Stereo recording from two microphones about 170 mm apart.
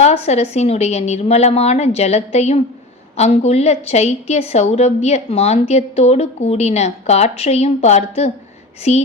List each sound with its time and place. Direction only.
0.0 s a woman's voice: 40° left (ahead or behind)